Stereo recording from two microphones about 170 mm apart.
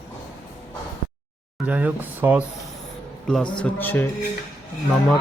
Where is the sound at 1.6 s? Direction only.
10° right (ahead or behind).